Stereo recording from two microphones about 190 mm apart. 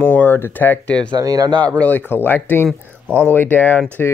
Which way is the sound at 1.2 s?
20° right (ahead or behind).